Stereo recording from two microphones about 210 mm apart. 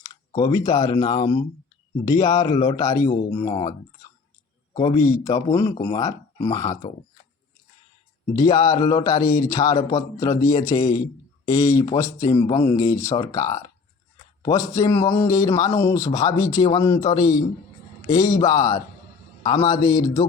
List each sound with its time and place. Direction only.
0.3 s speech: 15° left (ahead or behind)
4.7 s a man's voice: 25° left (ahead or behind)
4.9 s speech: 15° left (ahead or behind)
8.3 s speech: 15° left (ahead or behind)